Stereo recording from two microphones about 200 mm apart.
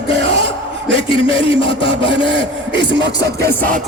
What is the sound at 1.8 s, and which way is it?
Speech, 60° right (ahead or behind).